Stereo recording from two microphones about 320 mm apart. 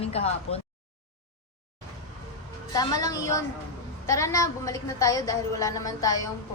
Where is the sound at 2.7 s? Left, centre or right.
Centre.